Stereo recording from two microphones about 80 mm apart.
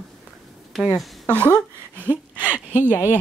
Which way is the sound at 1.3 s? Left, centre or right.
Left.